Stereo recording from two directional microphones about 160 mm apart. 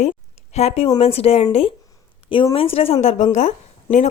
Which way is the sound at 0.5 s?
40° left (ahead or behind).